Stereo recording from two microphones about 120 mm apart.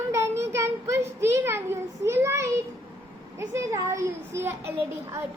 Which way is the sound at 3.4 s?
25° right (ahead or behind).